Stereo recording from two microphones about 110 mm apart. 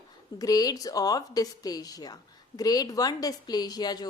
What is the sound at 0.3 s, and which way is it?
A woman's voice, 35° left (ahead or behind).